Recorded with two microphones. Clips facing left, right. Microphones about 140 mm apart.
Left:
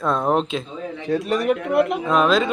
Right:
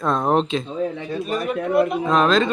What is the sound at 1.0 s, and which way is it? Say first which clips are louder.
Speech: left 4 dB; 85° left.